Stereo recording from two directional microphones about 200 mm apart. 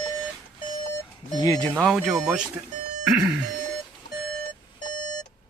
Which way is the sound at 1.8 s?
Centre (ahead or behind).